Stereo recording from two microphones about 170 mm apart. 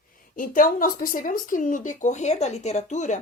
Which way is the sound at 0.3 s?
55° left (ahead or behind).